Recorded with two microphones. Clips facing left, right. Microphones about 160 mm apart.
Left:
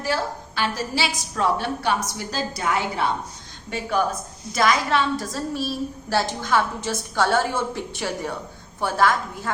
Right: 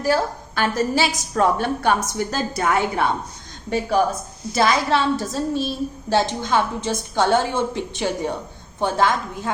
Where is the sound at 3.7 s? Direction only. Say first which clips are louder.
Right 4 dB; 35° right (ahead or behind).